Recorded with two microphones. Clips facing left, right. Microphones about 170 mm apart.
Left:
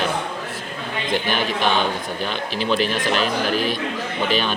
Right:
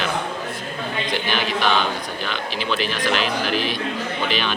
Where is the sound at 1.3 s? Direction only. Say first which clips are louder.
Right 1 dB; 45° left (ahead or behind).